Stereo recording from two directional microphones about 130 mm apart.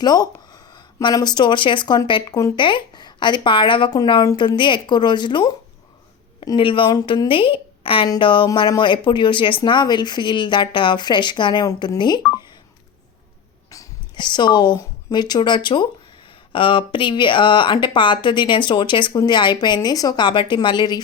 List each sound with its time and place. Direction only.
0.0 s a woman's voice: 30° left (ahead or behind)
8.4 s speech: 30° left (ahead or behind)
13.7 s speech: 30° left (ahead or behind)